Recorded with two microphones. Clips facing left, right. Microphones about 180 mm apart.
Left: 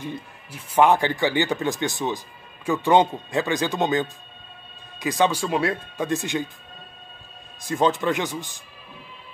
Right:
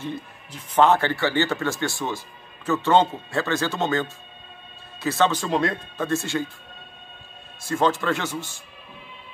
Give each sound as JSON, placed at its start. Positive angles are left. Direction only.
{"t": 0.0, "sound": "speech", "side_deg": 10}
{"t": 6.0, "sound": "speech", "side_deg": 15}
{"t": 7.6, "sound": "speech", "side_deg": 15}